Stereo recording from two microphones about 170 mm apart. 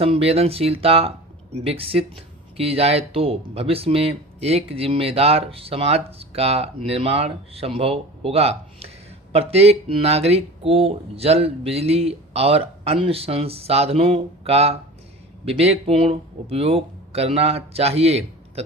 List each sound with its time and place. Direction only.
0.0 s speech: 35° right (ahead or behind)